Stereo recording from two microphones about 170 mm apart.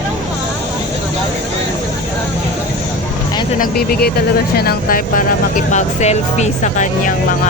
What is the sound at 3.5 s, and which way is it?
Speech, 60° left (ahead or behind).